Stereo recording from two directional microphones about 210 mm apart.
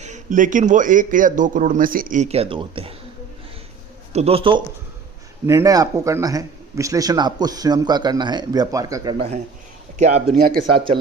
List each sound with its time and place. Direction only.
0.0 s speech: 35° right (ahead or behind)
4.1 s a man's voice: 30° right (ahead or behind)
9.1 s a man's voice: 30° right (ahead or behind)
10.2 s speech: 45° right (ahead or behind)